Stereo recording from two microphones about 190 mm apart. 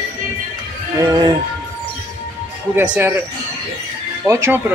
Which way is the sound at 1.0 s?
20° right (ahead or behind).